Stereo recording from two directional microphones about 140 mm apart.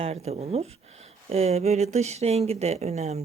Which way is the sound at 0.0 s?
50° right (ahead or behind).